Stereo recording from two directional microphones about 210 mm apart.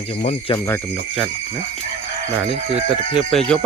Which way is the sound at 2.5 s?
30° right (ahead or behind).